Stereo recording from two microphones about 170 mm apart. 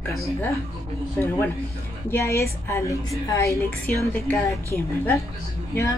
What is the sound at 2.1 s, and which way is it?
A woman's voice, 15° left (ahead or behind).